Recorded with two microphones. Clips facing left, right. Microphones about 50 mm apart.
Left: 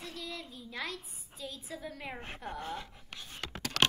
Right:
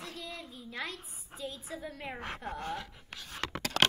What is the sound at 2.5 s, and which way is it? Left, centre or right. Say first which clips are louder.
Speech: left 1 dB; right.